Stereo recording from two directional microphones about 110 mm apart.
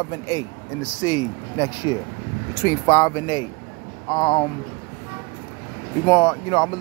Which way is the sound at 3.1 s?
40° left (ahead or behind).